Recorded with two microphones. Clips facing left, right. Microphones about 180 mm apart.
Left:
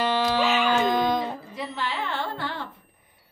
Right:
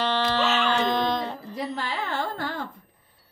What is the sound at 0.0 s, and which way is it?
Music, 10° left (ahead or behind).